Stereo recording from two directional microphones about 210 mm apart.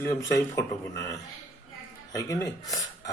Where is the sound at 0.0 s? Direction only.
15° left (ahead or behind).